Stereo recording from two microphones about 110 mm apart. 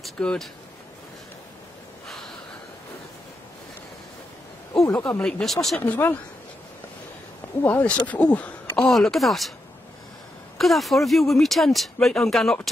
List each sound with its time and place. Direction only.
0.0 s speech: 5° left (ahead or behind)
4.9 s speech: 15° left (ahead or behind)
5.2 s speech: 5° left (ahead or behind)
5.8 s speech: 20° left (ahead or behind)
7.6 s speech: 15° left (ahead or behind)
10.6 s speech: centre (ahead or behind)